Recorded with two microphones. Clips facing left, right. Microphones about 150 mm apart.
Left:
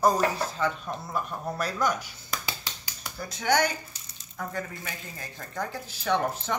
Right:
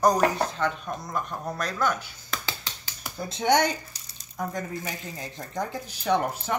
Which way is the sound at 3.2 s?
25° right (ahead or behind).